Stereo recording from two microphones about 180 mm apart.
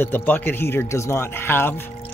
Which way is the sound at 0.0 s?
10° left (ahead or behind).